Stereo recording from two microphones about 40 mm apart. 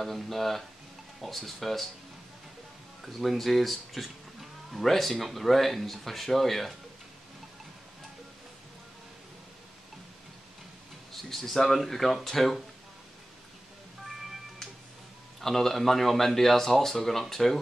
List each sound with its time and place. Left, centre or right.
0.0 s speech: centre
3.0 s speech: centre
11.2 s speech: centre
15.4 s speech: centre